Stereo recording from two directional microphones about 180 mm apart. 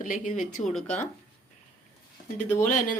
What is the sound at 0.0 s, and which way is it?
Speech, 45° left (ahead or behind).